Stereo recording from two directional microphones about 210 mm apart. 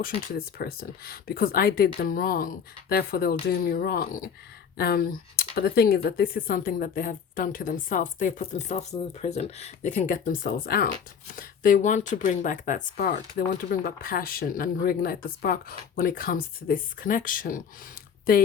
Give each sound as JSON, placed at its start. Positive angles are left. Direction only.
{"t": 0.0, "sound": "speech", "side_deg": 45}